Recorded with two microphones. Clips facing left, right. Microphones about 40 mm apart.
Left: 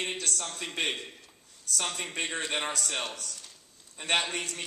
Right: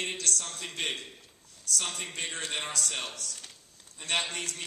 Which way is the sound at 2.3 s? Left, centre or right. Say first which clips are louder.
Left 3 dB; left.